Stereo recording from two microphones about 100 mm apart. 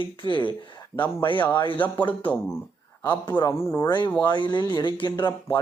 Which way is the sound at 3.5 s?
25° left (ahead or behind).